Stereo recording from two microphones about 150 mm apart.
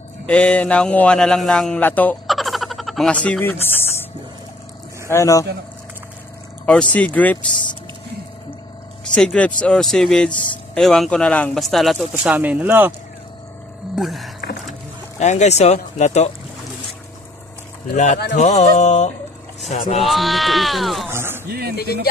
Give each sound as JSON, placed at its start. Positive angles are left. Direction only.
{"t": 0.3, "sound": "speech", "side_deg": 5}
{"t": 2.2, "sound": "a sound", "side_deg": 0}
{"t": 5.1, "sound": "speech", "side_deg": 20}
{"t": 6.6, "sound": "speech", "side_deg": 5}
{"t": 9.1, "sound": "speech", "side_deg": 5}
{"t": 12.3, "sound": "speech", "side_deg": -10}
{"t": 13.9, "sound": "speech", "side_deg": 0}
{"t": 14.7, "sound": "speech", "side_deg": 50}
{"t": 17.9, "sound": "speech", "side_deg": 55}
{"t": 20.1, "sound": "speech", "side_deg": 0}
{"t": 21.1, "sound": "a sound", "side_deg": -15}